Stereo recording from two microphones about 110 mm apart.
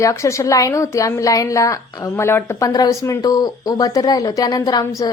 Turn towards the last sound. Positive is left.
turn(degrees=35)  # may be behind; listen again after turning